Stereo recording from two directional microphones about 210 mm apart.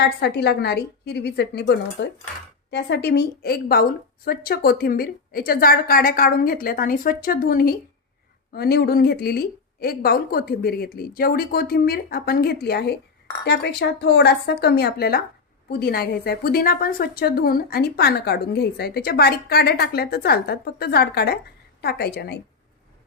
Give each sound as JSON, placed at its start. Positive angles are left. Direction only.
{"t": 0.0, "sound": "a woman's voice", "side_deg": 50}